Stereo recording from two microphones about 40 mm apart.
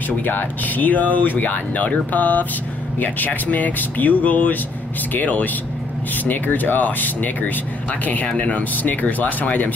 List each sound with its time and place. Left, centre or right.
0.2 s speech: left